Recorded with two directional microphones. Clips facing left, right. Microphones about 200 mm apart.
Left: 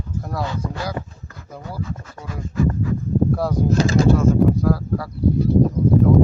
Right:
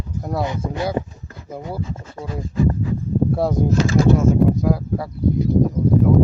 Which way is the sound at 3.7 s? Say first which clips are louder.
Even; 40° left (ahead or behind).